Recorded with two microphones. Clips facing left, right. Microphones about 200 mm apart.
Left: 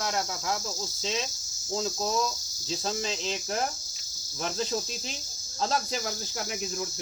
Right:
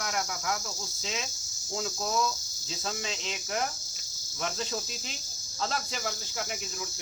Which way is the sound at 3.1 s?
35° left (ahead or behind).